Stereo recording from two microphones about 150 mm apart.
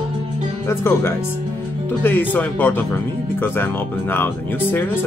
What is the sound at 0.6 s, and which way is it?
Music, 15° left (ahead or behind).